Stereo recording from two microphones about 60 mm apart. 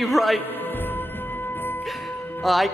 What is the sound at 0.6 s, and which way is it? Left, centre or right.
Music, left.